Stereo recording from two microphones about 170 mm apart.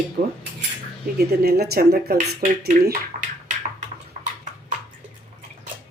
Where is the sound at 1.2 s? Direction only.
70° right (ahead or behind).